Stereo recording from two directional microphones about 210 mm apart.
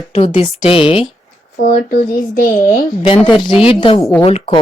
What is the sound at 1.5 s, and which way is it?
Speech, 50° left (ahead or behind).